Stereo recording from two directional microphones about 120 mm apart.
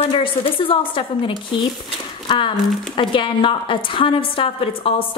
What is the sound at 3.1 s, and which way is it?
A woman's voice, 45° left (ahead or behind).